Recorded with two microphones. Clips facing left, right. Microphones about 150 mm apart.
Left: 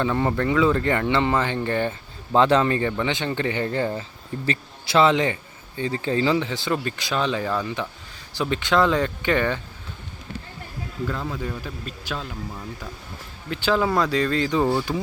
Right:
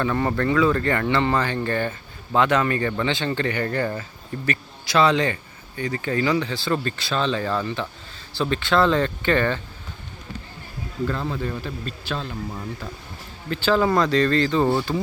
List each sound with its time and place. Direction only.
0.0 s speech: 15° left (ahead or behind)
11.3 s speech: 10° left (ahead or behind)
12.5 s speech: 5° right (ahead or behind)
13.7 s speech: 5° left (ahead or behind)